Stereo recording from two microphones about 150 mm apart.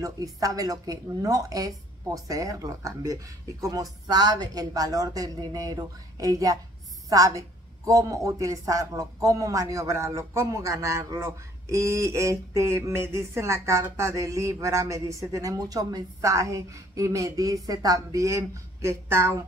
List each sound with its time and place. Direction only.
0.0 s a woman's voice: 25° right (ahead or behind)